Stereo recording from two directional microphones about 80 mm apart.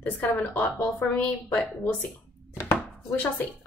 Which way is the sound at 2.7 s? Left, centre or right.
Left.